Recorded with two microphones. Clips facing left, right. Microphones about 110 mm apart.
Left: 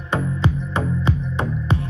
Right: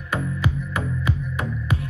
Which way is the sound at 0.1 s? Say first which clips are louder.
Left 3 dB; 25° left (ahead or behind).